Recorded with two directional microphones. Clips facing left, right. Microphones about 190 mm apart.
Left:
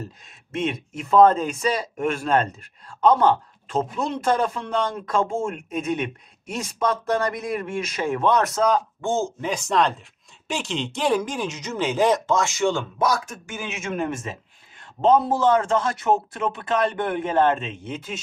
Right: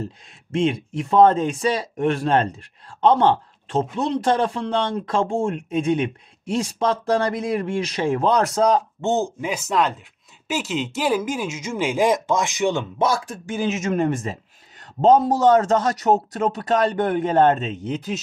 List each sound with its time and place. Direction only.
0.5 s speech: 30° right (ahead or behind)
9.0 s speech: 15° right (ahead or behind); by 18.1 s 40° right (ahead or behind)